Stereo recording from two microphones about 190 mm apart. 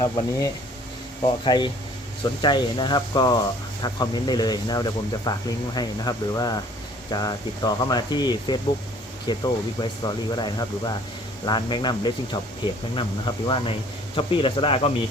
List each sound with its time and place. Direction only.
0.0 s speech: 20° left (ahead or behind)